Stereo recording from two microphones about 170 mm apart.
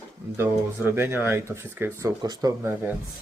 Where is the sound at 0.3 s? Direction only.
15° right (ahead or behind).